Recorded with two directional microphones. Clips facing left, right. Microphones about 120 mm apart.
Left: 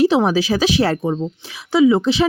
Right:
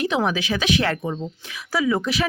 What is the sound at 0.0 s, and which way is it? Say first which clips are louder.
Speech: left 8 dB; 30° left (ahead or behind).